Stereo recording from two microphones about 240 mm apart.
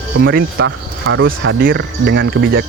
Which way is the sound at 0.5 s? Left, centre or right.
Right.